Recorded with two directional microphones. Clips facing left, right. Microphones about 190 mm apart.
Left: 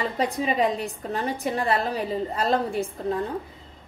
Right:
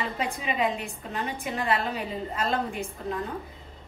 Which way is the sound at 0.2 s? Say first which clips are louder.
Left 5 dB; 35° left (ahead or behind).